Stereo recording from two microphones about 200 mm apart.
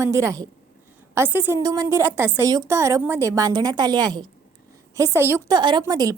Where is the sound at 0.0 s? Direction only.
15° right (ahead or behind).